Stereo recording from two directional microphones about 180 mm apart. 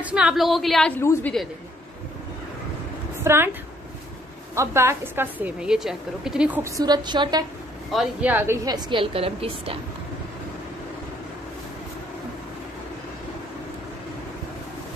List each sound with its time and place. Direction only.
0.0 s a woman's voice: 5° right (ahead or behind); by 1.3 s 10° left (ahead or behind)
3.3 s a woman's voice: 15° right (ahead or behind)
4.6 s a woman's voice: 15° right (ahead or behind)
6.8 s a woman's voice: 25° right (ahead or behind)
7.9 s a woman's voice: 5° right (ahead or behind)
8.6 s a woman's voice: 25° right (ahead or behind)